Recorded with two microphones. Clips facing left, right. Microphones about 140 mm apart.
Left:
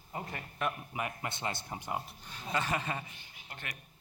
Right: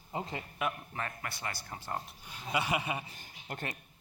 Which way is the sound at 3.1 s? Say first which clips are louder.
Right 7 dB; 40° right (ahead or behind).